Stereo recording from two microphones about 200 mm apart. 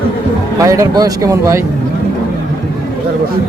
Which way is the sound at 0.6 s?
15° right (ahead or behind).